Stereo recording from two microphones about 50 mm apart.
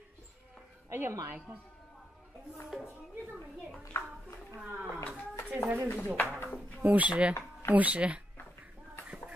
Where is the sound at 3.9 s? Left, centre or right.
Left.